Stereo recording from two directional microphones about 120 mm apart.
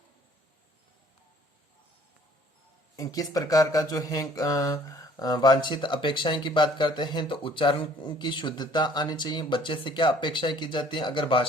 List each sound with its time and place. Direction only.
2.9 s speech: 30° left (ahead or behind)